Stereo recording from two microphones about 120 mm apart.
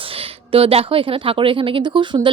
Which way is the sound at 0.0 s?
50° right (ahead or behind).